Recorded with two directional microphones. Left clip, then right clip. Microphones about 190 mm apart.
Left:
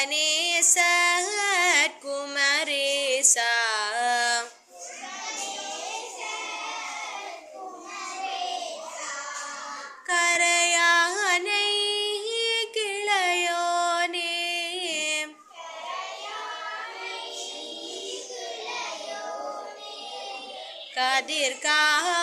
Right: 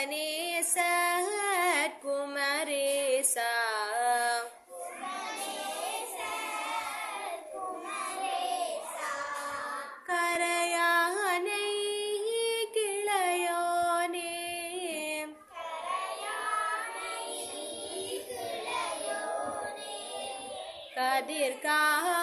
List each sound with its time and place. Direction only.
0.0 s music: 10° right (ahead or behind)
10.1 s music: 5° right (ahead or behind)
20.9 s a sound: 5° right (ahead or behind)